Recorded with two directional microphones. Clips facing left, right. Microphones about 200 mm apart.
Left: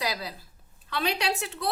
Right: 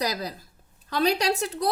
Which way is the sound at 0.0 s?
45° right (ahead or behind).